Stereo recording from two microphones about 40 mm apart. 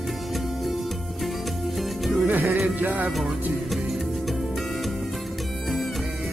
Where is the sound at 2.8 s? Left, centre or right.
Right.